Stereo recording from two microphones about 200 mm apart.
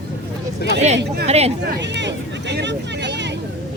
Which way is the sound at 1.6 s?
60° right (ahead or behind).